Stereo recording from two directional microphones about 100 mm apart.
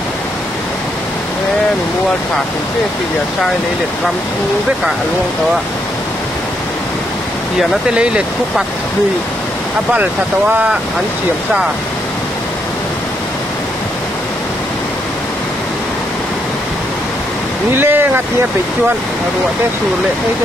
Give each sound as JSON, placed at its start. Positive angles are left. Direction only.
{"t": 10.5, "sound": "speech", "side_deg": -10}
{"t": 17.7, "sound": "speech", "side_deg": -20}